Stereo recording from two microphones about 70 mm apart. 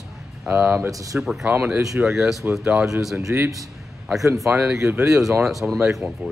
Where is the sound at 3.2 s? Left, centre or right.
Right.